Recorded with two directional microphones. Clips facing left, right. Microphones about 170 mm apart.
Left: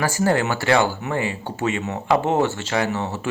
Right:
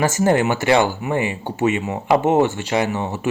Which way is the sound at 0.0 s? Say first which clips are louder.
Right 3 dB; 20° right (ahead or behind).